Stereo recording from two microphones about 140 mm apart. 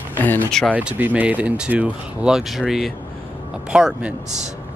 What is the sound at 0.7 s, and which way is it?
Speech, 10° right (ahead or behind).